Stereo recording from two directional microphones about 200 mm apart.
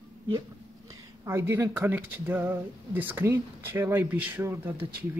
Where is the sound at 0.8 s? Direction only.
15° right (ahead or behind).